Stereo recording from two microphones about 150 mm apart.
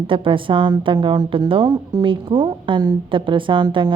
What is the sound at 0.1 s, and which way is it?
A woman's voice, 35° right (ahead or behind).